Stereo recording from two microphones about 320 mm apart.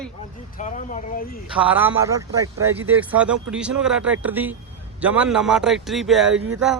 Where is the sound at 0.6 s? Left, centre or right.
Left.